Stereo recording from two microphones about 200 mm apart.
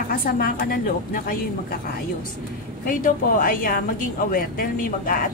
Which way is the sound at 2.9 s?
40° left (ahead or behind).